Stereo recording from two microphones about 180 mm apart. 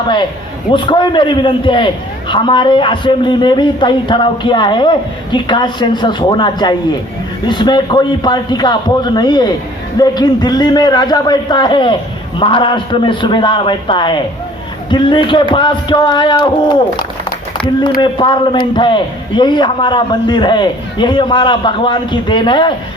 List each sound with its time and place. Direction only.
0.7 s a man's voice: 25° left (ahead or behind)